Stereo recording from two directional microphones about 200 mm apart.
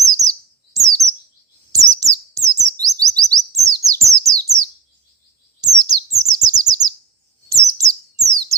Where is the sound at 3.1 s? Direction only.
15° right (ahead or behind).